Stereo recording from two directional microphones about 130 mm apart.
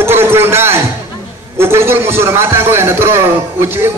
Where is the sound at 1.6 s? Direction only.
20° right (ahead or behind).